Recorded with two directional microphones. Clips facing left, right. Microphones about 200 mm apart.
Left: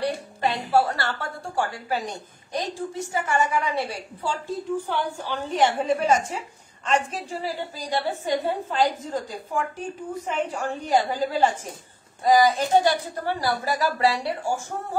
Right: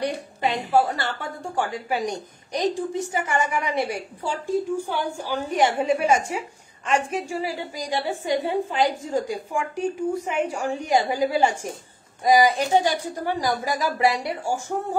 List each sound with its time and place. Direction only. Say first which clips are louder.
0.0 s a woman's voice: even; 15° right (ahead or behind)